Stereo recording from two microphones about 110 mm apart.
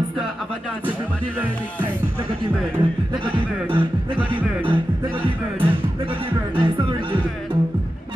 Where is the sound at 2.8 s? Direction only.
45° right (ahead or behind).